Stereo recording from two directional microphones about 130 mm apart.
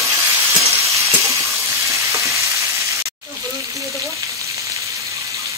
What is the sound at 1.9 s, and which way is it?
Stir, 25° right (ahead or behind).